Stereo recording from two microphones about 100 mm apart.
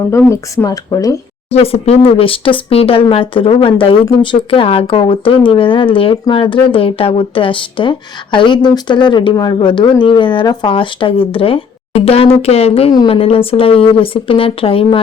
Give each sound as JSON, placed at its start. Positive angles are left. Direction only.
{"t": 0.3, "sound": "speech", "side_deg": 30}
{"t": 1.5, "sound": "speech", "side_deg": 90}
{"t": 10.7, "sound": "speech", "side_deg": 60}
{"t": 13.1, "sound": "speech", "side_deg": 70}